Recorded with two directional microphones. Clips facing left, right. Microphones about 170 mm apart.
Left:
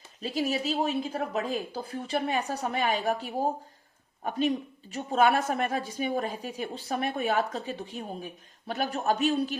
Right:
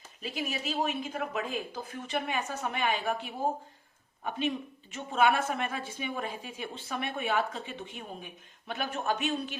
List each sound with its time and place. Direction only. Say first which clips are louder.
0.2 s a woman's voice: left 7 dB; 35° left (ahead or behind)